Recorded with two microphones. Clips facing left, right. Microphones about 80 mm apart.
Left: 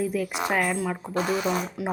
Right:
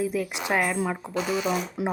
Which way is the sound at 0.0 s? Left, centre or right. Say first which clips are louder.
Left 1 dB; centre.